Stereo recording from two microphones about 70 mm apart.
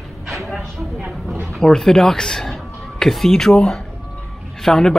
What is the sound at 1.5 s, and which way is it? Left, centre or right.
Speech, centre.